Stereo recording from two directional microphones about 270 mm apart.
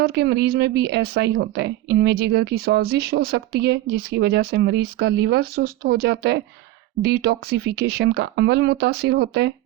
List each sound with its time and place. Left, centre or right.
0.0 s a woman's voice: right